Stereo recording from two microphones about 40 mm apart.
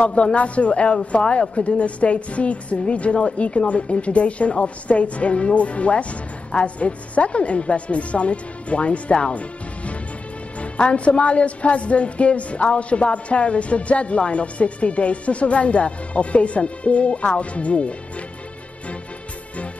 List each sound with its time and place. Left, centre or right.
0.0 s a man's voice: left